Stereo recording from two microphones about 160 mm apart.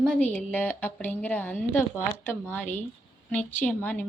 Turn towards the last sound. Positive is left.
turn(degrees=10)  # may be behind; listen again after turning